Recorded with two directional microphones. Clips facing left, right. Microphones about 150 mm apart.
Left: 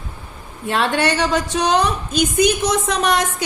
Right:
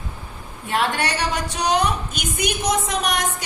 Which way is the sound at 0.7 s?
90° left.